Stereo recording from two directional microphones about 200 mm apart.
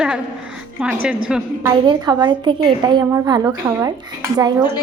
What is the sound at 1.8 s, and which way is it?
A woman's voice, 20° right (ahead or behind).